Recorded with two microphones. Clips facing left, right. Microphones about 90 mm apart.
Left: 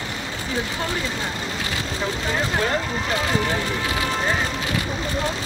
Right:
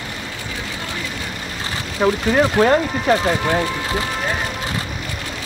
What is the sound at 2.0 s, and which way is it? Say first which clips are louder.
Speech: right 11 dB; 60° right (ahead or behind).